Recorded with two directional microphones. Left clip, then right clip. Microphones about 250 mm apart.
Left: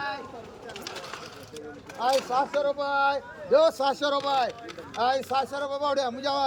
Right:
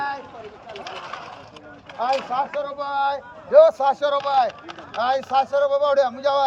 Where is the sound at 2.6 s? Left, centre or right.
Centre.